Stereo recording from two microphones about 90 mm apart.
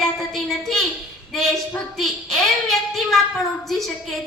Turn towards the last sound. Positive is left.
turn(degrees=5)  # may be behind; listen again after turning